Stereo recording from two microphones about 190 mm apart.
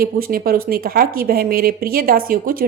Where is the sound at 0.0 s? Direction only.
50° right (ahead or behind).